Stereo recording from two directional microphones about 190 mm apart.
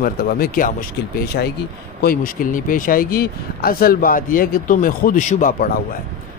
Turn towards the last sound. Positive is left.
turn(degrees=45)  # may be behind; listen again after turning